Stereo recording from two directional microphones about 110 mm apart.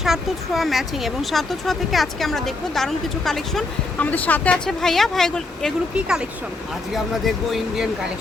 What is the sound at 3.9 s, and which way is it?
Speech, 15° left (ahead or behind).